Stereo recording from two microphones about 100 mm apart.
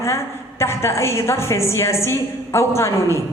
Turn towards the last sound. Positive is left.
turn(degrees=25)  # may be behind; listen again after turning